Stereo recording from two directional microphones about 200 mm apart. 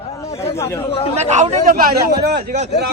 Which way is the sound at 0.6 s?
15° left (ahead or behind).